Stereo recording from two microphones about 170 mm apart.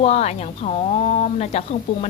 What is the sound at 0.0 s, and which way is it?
Speech, 40° left (ahead or behind).